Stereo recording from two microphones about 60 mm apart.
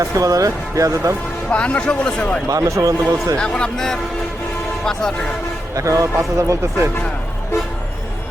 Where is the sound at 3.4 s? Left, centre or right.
Centre.